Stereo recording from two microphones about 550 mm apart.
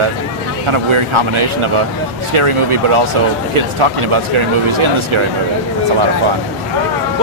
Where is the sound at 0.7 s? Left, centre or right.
Right.